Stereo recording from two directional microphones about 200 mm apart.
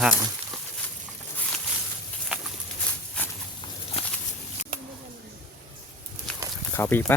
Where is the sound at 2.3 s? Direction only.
5° right (ahead or behind).